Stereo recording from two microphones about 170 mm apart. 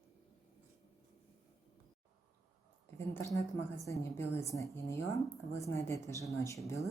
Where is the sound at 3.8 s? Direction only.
20° left (ahead or behind).